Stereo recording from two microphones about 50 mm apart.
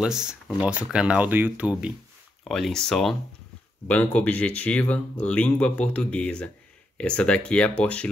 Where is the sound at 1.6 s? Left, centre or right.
Right.